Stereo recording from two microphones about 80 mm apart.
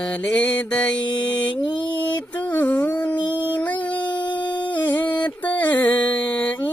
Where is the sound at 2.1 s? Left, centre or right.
Left.